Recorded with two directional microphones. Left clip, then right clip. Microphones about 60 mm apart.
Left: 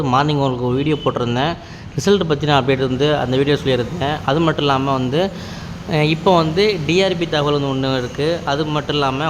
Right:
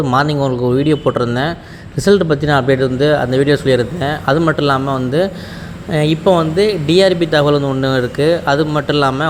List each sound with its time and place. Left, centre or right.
0.1 s speech: right
3.8 s speech: right
5.9 s speech: right
6.8 s speech: right